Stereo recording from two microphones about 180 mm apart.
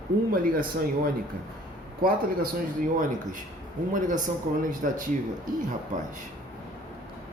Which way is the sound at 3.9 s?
45° right (ahead or behind).